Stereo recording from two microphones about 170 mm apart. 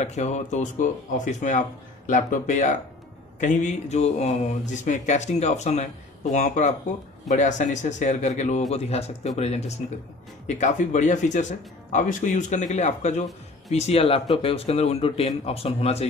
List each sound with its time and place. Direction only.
0.0 s speech: 40° left (ahead or behind)